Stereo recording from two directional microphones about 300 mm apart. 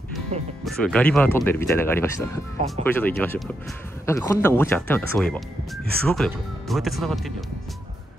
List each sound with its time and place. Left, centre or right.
0.3 s speech: right
0.7 s speech: centre